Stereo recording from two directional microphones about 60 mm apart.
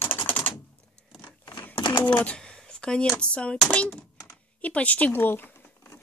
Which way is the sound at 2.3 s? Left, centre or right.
Centre.